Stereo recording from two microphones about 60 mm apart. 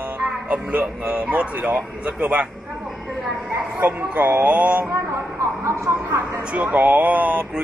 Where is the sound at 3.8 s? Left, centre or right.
Right.